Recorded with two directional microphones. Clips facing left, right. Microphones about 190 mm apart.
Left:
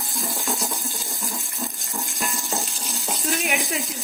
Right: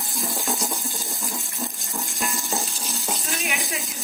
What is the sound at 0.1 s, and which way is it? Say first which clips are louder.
Water: right 1 dB; centre (ahead or behind).